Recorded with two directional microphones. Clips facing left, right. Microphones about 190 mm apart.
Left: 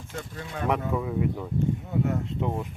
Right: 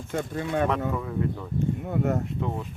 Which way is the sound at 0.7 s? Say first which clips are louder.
Left 1 dB; 10° left (ahead or behind).